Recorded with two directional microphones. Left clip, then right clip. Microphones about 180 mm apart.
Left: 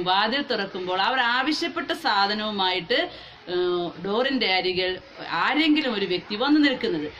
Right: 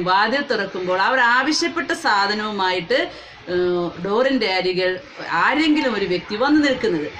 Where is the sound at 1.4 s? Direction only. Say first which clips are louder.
Right 5 dB; 45° left (ahead or behind).